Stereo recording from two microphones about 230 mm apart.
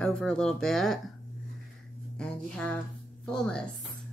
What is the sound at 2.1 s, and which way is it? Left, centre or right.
Speech, centre.